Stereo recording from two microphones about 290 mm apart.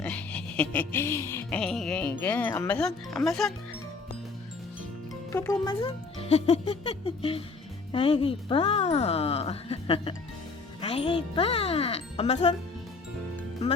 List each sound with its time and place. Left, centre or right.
0.0 s music: centre
5.3 s speech: centre